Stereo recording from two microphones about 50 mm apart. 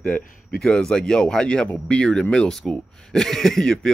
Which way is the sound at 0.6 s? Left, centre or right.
Centre.